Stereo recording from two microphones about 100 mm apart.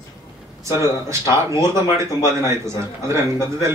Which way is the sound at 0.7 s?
30° right (ahead or behind).